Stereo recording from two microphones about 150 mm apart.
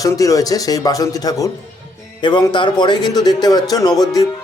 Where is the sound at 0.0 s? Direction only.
25° left (ahead or behind).